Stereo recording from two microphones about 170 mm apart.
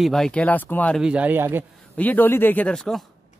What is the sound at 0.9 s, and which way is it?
Speech, 5° right (ahead or behind).